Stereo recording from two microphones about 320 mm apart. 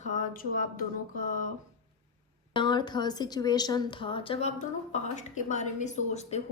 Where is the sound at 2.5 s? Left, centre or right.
Centre.